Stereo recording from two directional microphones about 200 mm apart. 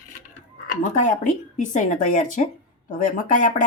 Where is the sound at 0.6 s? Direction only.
40° left (ahead or behind).